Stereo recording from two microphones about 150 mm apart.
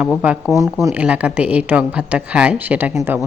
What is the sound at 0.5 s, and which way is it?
Speech, 20° right (ahead or behind).